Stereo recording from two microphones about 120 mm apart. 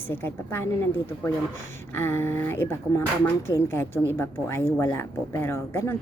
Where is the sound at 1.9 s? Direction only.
20° left (ahead or behind).